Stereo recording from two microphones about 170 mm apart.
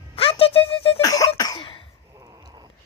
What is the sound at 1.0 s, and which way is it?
Cough, 20° left (ahead or behind).